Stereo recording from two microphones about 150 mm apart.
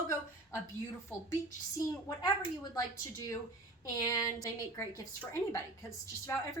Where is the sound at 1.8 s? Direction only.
25° left (ahead or behind).